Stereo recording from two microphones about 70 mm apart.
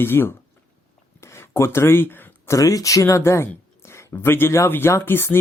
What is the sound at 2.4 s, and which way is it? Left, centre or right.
Speech, left.